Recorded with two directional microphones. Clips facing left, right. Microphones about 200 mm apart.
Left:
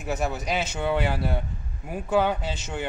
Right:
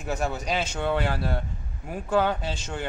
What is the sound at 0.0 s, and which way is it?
A man's voice, 5° left (ahead or behind).